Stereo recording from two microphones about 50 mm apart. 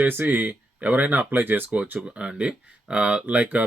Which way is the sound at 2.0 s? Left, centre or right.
Right.